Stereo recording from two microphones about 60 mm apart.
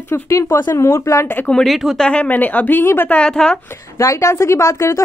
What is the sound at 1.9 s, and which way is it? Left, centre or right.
Speech, centre.